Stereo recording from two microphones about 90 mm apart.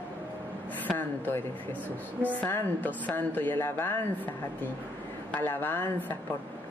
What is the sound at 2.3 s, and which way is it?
Speech, 20° left (ahead or behind).